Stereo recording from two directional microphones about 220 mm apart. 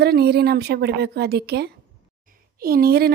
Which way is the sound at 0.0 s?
45° right (ahead or behind).